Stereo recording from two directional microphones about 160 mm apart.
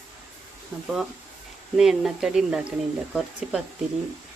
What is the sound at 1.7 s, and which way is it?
Speech, 5° right (ahead or behind).